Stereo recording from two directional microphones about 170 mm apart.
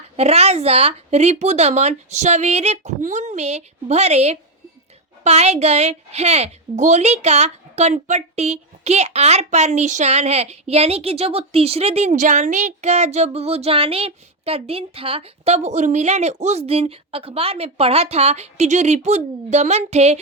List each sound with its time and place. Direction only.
0.2 s a woman's voice: 40° right (ahead or behind)